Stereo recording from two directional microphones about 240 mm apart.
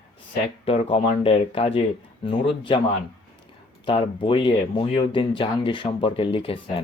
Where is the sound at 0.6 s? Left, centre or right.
Left.